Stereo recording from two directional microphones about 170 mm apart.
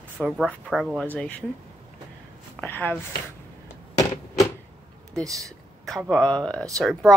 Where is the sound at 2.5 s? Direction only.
10° left (ahead or behind).